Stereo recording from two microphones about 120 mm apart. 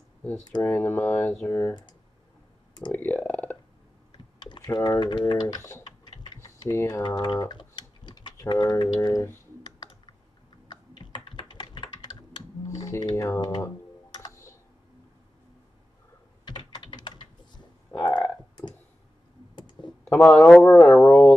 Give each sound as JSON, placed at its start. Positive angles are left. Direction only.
{"t": 0.6, "sound": "speech", "side_deg": 15}
{"t": 2.9, "sound": "clicking", "side_deg": 15}
{"t": 4.1, "sound": "typing", "side_deg": 40}
{"t": 4.7, "sound": "speech", "side_deg": 35}
{"t": 6.4, "sound": "typing", "side_deg": 25}
{"t": 8.9, "sound": "speech", "side_deg": 35}
{"t": 9.8, "sound": "computer keyboard", "side_deg": 40}
{"t": 13.4, "sound": "speech", "side_deg": 35}
{"t": 14.1, "sound": "computer keyboard", "side_deg": 30}
{"t": 16.4, "sound": "typing", "side_deg": 35}
{"t": 17.9, "sound": "a sound", "side_deg": 10}
{"t": 19.5, "sound": "computer keyboard", "side_deg": 40}
{"t": 20.1, "sound": "a man's voice", "side_deg": 20}